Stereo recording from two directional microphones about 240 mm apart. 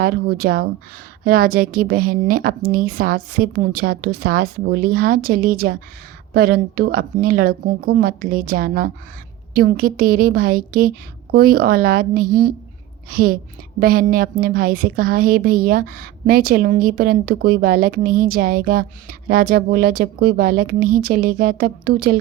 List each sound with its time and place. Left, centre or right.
0.0 s a woman's voice: right